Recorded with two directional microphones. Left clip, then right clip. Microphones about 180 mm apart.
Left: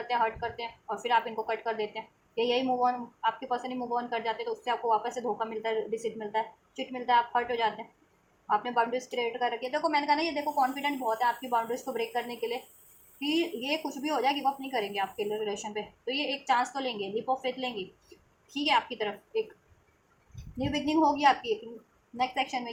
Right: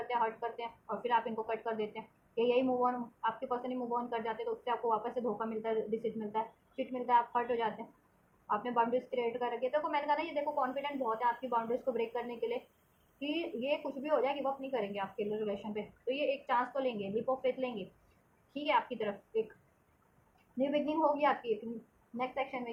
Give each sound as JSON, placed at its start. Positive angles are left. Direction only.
{"t": 0.1, "sound": "a woman's voice", "side_deg": 30}
{"t": 20.6, "sound": "a woman's voice", "side_deg": 35}